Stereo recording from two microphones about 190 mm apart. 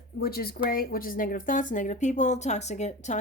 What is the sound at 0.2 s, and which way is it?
A woman's voice, 55° left (ahead or behind).